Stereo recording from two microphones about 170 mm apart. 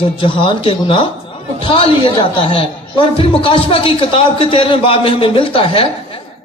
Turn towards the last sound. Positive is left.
turn(degrees=35)  # may be behind; listen again after turning